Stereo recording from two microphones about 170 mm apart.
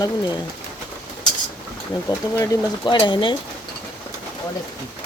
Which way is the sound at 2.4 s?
25° left (ahead or behind).